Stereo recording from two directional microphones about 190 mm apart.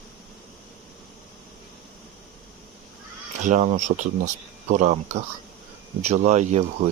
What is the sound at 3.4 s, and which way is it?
Speech, 40° right (ahead or behind).